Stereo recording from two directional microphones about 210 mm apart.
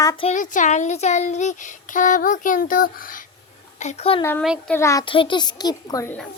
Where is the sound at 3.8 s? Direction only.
30° left (ahead or behind).